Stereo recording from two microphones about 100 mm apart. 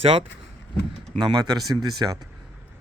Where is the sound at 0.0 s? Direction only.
65° right (ahead or behind).